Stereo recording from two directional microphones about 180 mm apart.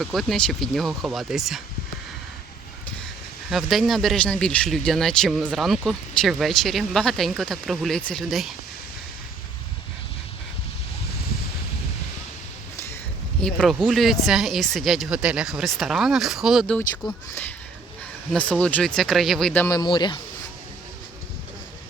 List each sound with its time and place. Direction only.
0.0 s speech: centre (ahead or behind)
3.5 s speech: centre (ahead or behind)
13.4 s speech: centre (ahead or behind)
18.3 s speech: 5° left (ahead or behind)
19.6 s speech: 20° left (ahead or behind)